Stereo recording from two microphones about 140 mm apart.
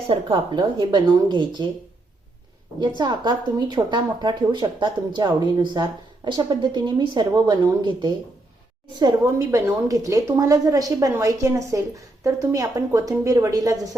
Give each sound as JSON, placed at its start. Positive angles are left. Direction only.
{"t": 0.1, "sound": "speech", "side_deg": -35}
{"t": 3.0, "sound": "a woman's voice", "side_deg": -30}